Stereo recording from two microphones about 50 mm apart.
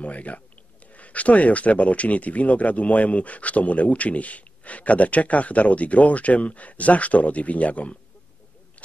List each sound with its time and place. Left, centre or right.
0.0 s speech: left